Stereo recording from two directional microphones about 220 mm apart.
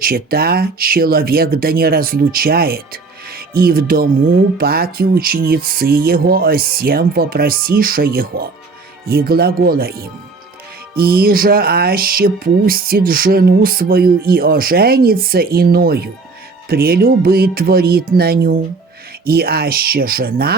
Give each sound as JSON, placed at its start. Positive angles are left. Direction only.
{"t": 0.0, "sound": "music", "side_deg": -40}